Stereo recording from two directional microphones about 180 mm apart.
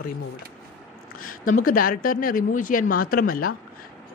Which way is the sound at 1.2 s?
50° left (ahead or behind).